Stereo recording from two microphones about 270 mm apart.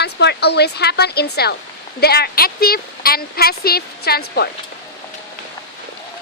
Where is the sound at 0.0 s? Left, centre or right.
Left.